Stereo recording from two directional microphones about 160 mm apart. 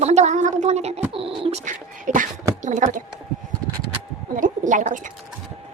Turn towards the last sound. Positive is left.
turn(degrees=-50)  # may be behind; listen again after turning